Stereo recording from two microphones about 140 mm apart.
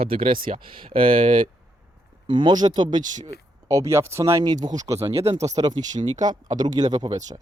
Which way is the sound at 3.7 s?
20° right (ahead or behind).